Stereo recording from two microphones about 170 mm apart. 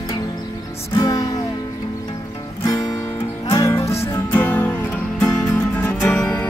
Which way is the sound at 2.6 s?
20° left (ahead or behind).